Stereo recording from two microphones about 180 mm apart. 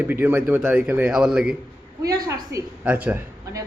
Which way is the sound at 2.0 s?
15° right (ahead or behind).